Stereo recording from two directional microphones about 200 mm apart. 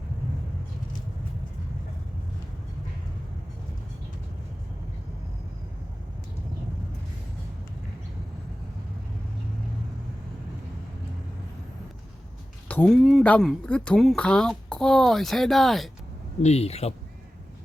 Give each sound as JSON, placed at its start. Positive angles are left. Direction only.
{"t": 12.6, "sound": "speech", "side_deg": 5}
{"t": 16.4, "sound": "speech", "side_deg": 30}